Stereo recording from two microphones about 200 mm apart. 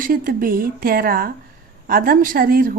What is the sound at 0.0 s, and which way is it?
Speech, 45° right (ahead or behind).